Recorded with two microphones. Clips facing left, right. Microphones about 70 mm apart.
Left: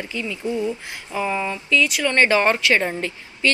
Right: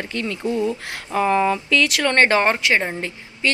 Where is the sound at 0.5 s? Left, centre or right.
Right.